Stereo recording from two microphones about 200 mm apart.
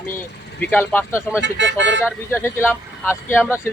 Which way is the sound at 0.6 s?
10° left (ahead or behind).